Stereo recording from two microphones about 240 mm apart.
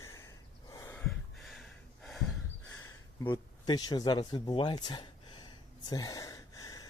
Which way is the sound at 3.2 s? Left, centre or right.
Centre.